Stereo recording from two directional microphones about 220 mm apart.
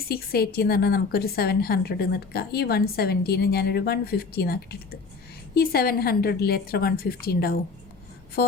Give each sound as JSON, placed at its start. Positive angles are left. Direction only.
{"t": 0.1, "sound": "a woman's voice", "side_deg": 45}